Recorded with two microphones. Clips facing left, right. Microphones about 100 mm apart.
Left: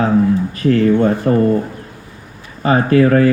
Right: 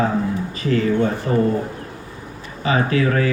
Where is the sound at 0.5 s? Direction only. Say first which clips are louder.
Left 5 dB; 55° left (ahead or behind).